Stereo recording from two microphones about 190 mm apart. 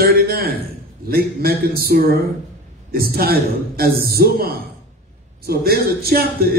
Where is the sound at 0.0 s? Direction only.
55° right (ahead or behind).